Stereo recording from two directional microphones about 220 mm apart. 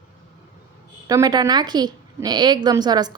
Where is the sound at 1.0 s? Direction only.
15° right (ahead or behind).